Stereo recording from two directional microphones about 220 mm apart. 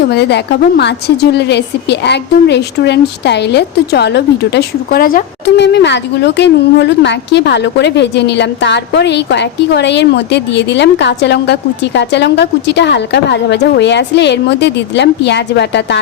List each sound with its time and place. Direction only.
0.1 s a woman's voice: 50° left (ahead or behind)